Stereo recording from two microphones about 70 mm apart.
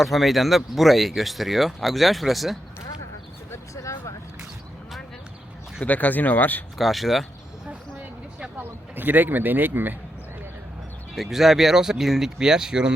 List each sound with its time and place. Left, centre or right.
0.0 s speech: centre
3.5 s a sound: left
5.8 s speech: left
6.7 s speech: centre
7.7 s a sound: centre
9.0 s speech: right
11.1 s speech: centre